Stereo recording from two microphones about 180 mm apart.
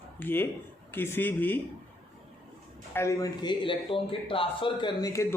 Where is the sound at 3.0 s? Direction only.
15° left (ahead or behind).